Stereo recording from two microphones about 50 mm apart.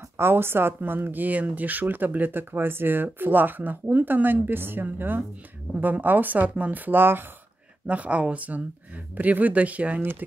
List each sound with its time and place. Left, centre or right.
0.2 s speech: right
6.4 s speech: right
6.7 s speech: right
7.8 s speech: right